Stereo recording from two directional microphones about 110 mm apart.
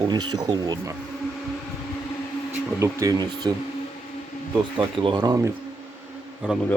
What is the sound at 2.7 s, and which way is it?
Speech, 30° right (ahead or behind).